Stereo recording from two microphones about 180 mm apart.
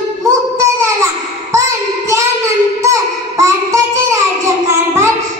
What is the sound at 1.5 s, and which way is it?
Child singing, 15° right (ahead or behind).